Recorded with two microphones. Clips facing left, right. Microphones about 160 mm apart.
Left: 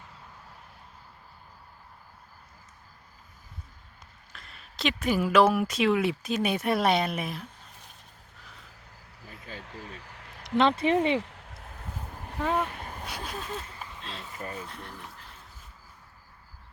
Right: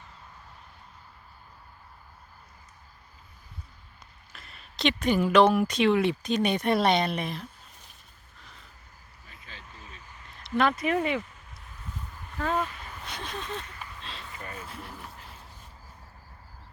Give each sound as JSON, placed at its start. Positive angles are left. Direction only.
{"t": 4.3, "sound": "speech", "side_deg": 0}
{"t": 9.6, "sound": "vehicle", "side_deg": 70}
{"t": 10.6, "sound": "speech", "side_deg": 25}
{"t": 11.2, "sound": "a sound", "side_deg": 75}
{"t": 12.4, "sound": "speech", "side_deg": 15}
{"t": 12.6, "sound": "speech", "side_deg": 55}
{"t": 13.1, "sound": "a sound", "side_deg": 10}
{"t": 14.6, "sound": "speech", "side_deg": -5}